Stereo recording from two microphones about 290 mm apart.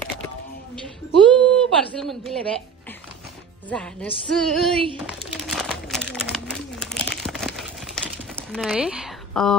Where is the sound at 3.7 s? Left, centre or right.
Centre.